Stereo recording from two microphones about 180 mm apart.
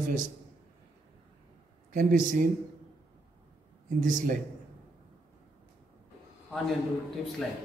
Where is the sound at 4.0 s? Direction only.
45° right (ahead or behind).